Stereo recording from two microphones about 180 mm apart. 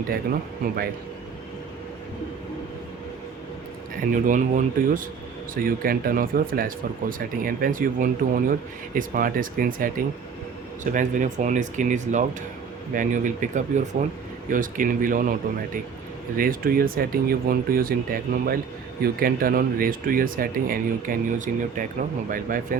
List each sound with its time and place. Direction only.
4.1 s speech: 45° right (ahead or behind)
10.9 s speech: 45° right (ahead or behind)